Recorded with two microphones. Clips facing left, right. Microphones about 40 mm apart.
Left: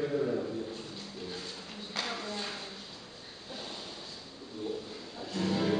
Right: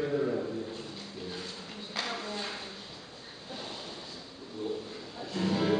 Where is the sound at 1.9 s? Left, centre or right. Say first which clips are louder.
Right 1 dB; centre.